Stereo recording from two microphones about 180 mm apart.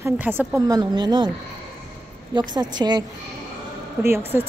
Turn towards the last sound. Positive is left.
turn(degrees=-10)  # may be behind; listen again after turning